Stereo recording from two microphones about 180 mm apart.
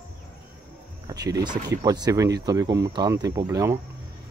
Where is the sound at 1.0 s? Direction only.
20° right (ahead or behind).